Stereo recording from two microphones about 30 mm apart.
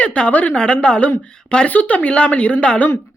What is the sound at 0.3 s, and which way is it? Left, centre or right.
Speech, left.